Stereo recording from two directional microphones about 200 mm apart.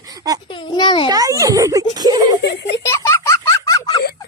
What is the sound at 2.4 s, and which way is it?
Speech, 60° left (ahead or behind).